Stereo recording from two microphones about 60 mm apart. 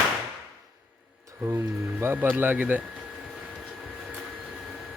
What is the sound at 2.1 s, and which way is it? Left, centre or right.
Speech, right.